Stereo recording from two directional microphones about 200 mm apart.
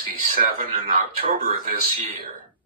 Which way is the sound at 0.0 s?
45° right (ahead or behind).